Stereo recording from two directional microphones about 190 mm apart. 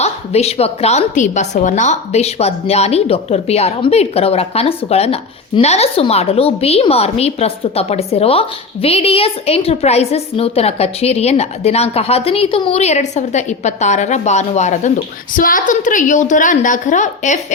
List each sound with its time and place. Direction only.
0.0 s a woman's voice: 35° left (ahead or behind)